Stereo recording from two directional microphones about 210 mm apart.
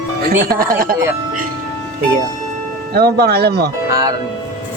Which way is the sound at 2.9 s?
50° right (ahead or behind).